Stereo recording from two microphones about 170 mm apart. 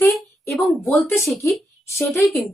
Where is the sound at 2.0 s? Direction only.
Centre (ahead or behind).